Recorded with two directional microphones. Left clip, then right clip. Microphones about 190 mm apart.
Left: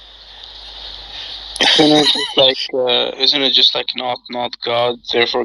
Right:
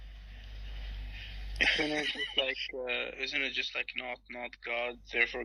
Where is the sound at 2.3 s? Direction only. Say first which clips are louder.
Left 19 dB; 45° left (ahead or behind).